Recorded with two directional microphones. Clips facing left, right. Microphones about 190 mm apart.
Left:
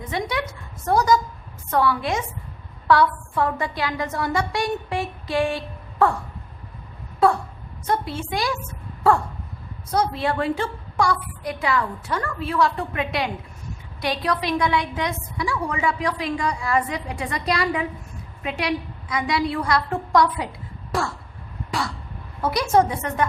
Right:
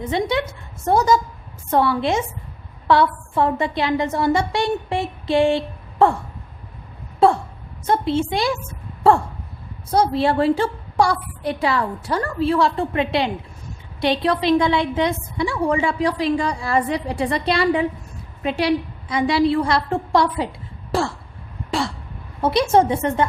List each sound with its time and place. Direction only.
0.1 s a woman's voice: 25° right (ahead or behind)
7.2 s a woman's voice: 30° right (ahead or behind)
9.9 s a woman's voice: 30° right (ahead or behind)
20.9 s throat clearing: 30° right (ahead or behind)
22.4 s a woman's voice: 25° right (ahead or behind)